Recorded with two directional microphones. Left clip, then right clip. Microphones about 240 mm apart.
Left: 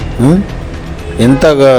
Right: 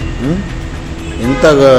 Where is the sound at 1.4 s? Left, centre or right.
Left.